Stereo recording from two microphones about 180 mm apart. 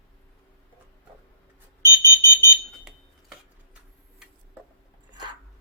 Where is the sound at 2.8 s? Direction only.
Centre (ahead or behind).